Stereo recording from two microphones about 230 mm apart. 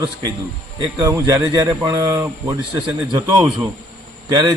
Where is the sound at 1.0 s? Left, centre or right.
Centre.